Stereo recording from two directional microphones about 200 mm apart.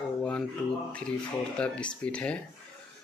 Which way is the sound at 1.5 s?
5° left (ahead or behind).